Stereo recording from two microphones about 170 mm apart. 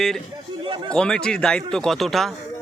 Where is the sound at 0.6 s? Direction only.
30° right (ahead or behind).